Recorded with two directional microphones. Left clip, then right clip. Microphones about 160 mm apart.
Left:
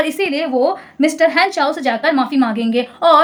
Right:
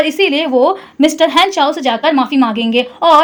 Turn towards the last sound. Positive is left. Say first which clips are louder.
# right 3 dB
turn(degrees=-15)  # may be behind; listen again after turning